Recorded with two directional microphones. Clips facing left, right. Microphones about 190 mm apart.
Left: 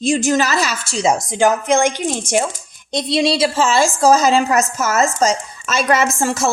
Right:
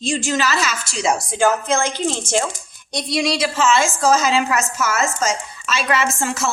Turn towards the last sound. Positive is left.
turn(degrees=40)  # may be behind; listen again after turning